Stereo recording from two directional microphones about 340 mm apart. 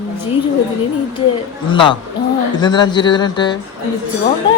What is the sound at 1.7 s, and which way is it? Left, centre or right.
Speech, centre.